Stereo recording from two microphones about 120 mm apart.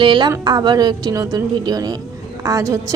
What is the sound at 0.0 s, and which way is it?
A woman's voice, 40° right (ahead or behind).